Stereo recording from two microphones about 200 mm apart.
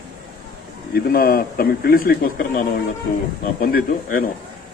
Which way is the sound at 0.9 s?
45° left (ahead or behind).